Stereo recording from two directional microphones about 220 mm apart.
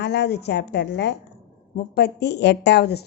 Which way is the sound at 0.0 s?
50° left (ahead or behind).